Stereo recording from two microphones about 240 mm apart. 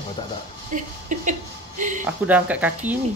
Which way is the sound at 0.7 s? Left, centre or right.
Right.